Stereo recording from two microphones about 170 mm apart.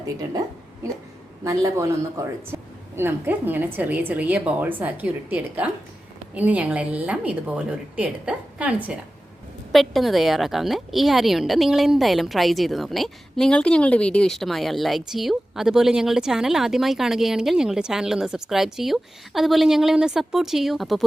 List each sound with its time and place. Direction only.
0.0 s speech: 20° right (ahead or behind)
1.5 s a woman's voice: 20° right (ahead or behind); by 21.0 s centre (ahead or behind)